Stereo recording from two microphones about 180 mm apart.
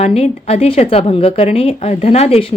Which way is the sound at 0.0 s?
35° left (ahead or behind).